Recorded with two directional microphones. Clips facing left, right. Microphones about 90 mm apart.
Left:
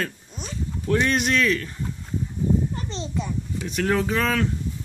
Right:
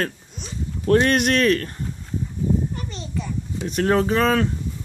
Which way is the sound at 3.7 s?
35° right (ahead or behind).